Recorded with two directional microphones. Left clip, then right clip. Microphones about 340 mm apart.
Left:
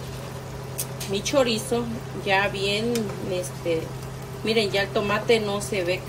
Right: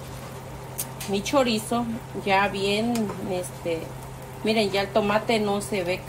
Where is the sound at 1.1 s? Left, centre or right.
Centre.